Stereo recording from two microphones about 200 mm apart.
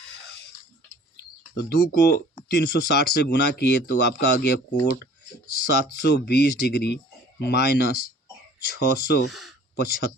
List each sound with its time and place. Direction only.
1.1 s a sound: 55° left (ahead or behind)
2.5 s speech: 55° left (ahead or behind)
5.6 s speech: 55° left (ahead or behind)
9.3 s speech: centre (ahead or behind)
9.7 s speech: 55° left (ahead or behind)